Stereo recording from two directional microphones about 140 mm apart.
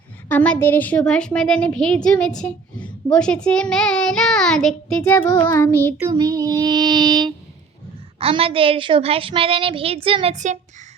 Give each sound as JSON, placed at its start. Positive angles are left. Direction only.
{"t": 0.3, "sound": "a woman's voice", "side_deg": 10}
{"t": 5.3, "sound": "child singing", "side_deg": 25}
{"t": 6.0, "sound": "child singing", "side_deg": -25}
{"t": 8.2, "sound": "a woman's voice", "side_deg": -40}
{"t": 10.3, "sound": "speech", "side_deg": -60}